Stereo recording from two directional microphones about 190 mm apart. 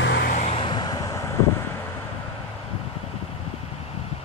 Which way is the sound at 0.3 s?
35° left (ahead or behind).